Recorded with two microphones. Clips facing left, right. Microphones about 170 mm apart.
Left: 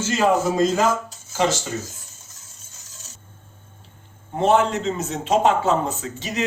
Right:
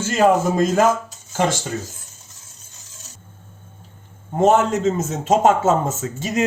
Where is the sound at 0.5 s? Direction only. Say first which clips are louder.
Right 2 dB; 50° right (ahead or behind).